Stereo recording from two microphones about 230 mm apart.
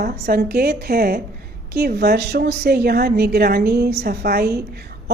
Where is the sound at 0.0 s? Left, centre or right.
Right.